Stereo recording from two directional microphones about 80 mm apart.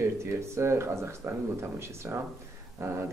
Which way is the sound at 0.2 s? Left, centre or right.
Right.